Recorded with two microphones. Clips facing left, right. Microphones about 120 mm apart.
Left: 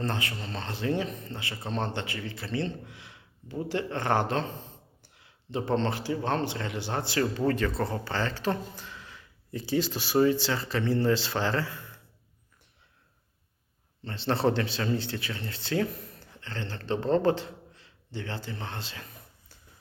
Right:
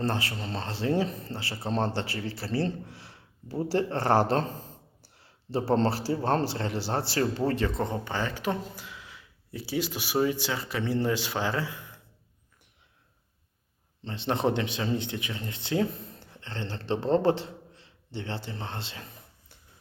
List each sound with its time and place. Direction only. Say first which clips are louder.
0.0 s speech: right 2 dB; 30° right (ahead or behind); by 11.9 s 15° right (ahead or behind)
14.0 s speech: left 1 dB; 20° right (ahead or behind)